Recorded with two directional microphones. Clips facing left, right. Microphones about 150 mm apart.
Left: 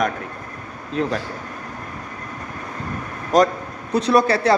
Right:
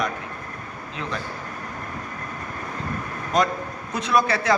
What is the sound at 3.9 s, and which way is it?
Speech, 35° left (ahead or behind).